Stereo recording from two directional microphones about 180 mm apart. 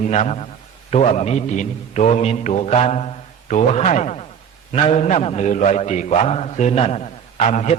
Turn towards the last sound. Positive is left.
turn(degrees=40)  # may be behind; listen again after turning